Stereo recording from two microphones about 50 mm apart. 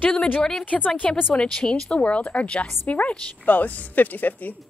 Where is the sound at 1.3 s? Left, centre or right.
Centre.